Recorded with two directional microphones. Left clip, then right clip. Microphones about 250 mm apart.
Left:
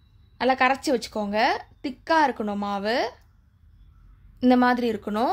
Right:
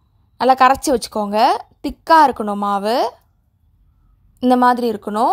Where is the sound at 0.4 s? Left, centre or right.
Right.